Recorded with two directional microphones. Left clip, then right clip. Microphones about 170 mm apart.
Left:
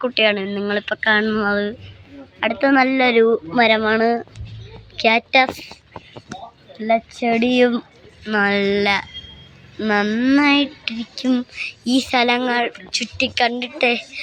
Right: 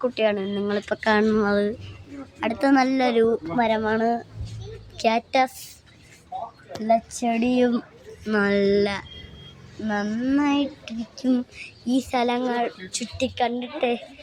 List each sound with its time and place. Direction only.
0.0 s speech: centre (ahead or behind)
0.9 s speech: 15° right (ahead or behind); by 3.2 s 5° left (ahead or behind)
3.3 s a child's voice: 15° left (ahead or behind)
4.9 s speech: 5° left (ahead or behind)
6.8 s speech: 20° left (ahead or behind)
8.2 s speech: 5° right (ahead or behind)
9.8 s a child's voice: 20° left (ahead or behind)